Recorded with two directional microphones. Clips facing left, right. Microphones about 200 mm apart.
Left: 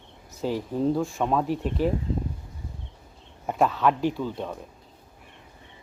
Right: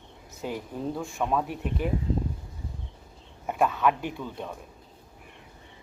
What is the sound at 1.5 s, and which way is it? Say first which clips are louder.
Speech: left 5 dB; 35° left (ahead or behind).